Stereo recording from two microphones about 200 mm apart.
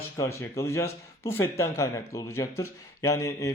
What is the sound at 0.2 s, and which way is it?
Speech, 15° left (ahead or behind).